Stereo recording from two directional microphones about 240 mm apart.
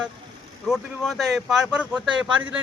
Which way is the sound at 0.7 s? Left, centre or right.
Centre.